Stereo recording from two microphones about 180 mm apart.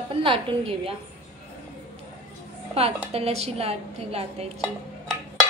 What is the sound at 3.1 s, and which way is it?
Speech, 35° right (ahead or behind).